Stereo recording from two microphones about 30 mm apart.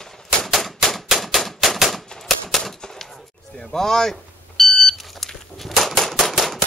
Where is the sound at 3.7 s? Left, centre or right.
Centre.